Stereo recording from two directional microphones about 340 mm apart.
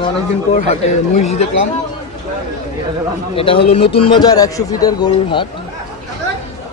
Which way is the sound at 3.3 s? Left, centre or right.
Centre.